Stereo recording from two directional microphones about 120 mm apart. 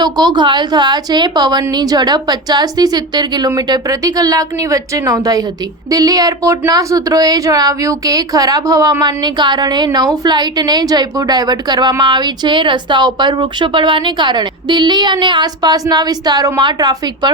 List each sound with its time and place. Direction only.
0.0 s speech: 35° right (ahead or behind)